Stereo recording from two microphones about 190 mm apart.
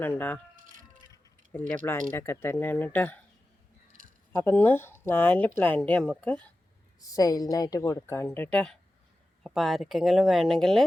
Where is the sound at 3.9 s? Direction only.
45° right (ahead or behind).